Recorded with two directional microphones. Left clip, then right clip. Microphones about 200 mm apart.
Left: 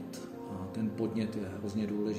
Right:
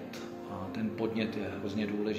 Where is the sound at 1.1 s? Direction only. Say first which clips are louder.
Right 2 dB; 55° left (ahead or behind).